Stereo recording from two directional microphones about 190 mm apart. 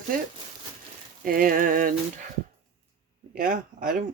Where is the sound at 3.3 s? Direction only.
45° right (ahead or behind).